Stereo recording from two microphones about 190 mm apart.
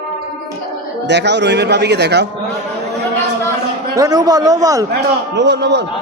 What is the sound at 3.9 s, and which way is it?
Speech, 20° right (ahead or behind).